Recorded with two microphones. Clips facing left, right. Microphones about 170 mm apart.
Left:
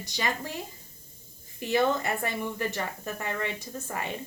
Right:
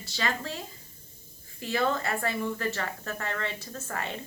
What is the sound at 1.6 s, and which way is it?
Speech, 20° left (ahead or behind).